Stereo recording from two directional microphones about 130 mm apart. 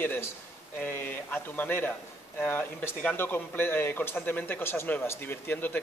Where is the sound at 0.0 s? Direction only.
15° left (ahead or behind).